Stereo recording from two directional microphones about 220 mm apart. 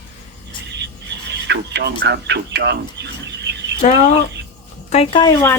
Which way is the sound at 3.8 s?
30° left (ahead or behind).